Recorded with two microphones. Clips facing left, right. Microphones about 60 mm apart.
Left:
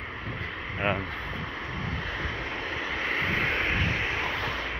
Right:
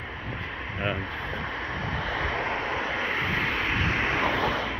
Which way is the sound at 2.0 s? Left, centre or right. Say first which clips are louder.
Right 5 dB; right.